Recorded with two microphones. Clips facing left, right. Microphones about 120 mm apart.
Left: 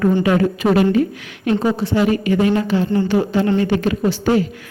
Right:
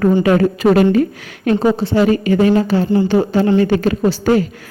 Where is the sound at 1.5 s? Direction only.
30° right (ahead or behind).